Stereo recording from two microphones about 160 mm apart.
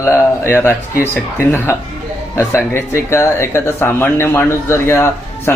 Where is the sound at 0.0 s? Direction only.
15° left (ahead or behind).